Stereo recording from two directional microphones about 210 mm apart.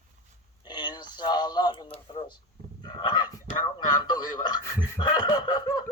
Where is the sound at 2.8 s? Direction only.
20° left (ahead or behind).